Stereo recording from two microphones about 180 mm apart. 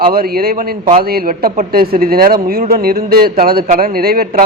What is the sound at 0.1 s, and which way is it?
A man's voice, 55° right (ahead or behind).